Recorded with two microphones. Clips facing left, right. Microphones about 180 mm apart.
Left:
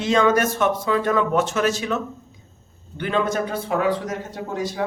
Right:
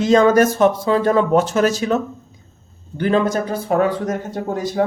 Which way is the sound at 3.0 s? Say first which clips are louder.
Right 5 dB; 40° right (ahead or behind).